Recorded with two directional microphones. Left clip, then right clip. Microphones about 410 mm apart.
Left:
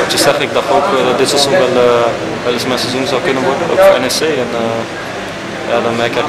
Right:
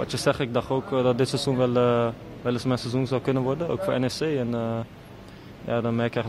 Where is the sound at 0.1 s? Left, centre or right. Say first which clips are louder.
Left 13 dB; right.